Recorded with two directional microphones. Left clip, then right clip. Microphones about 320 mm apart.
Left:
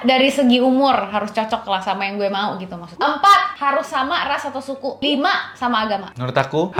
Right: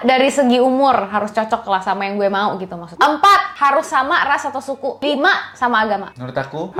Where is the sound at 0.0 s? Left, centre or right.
Right.